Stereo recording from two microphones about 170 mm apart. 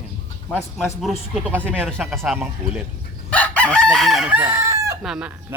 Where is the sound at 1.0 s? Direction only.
Centre (ahead or behind).